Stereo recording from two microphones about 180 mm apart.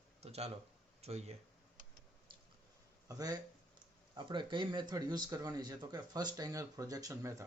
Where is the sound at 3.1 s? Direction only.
20° right (ahead or behind).